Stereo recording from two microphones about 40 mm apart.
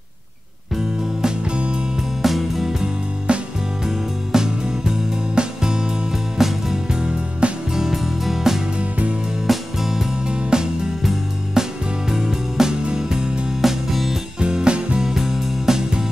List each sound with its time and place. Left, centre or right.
1.4 s music: right
2.2 s music: centre
3.3 s music: right
3.8 s music: centre
7.0 s music: right
7.7 s music: centre
10.2 s music: centre
11.0 s music: centre
13.6 s music: centre
14.4 s music: right
15.0 s music: centre